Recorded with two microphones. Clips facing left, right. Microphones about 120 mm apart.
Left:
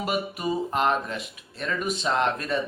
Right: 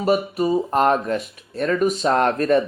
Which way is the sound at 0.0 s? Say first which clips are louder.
Right 8 dB; 40° right (ahead or behind).